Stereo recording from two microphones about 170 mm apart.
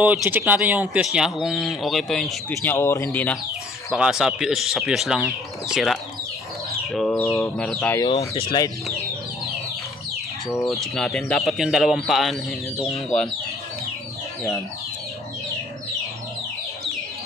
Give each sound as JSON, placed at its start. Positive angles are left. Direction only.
{"t": 0.0, "sound": "speech", "side_deg": -10}
{"t": 2.5, "sound": "speech", "side_deg": 15}
{"t": 3.9, "sound": "speech", "side_deg": -5}
{"t": 7.2, "sound": "speech", "side_deg": 5}
{"t": 8.0, "sound": "speech", "side_deg": 25}
{"t": 10.6, "sound": "speech", "side_deg": 0}